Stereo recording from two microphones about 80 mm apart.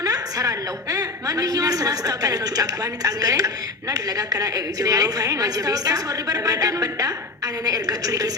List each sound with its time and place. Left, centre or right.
0.0 s a woman's voice: right